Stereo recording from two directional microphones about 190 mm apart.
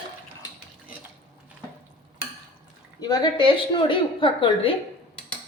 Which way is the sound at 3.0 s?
20° left (ahead or behind).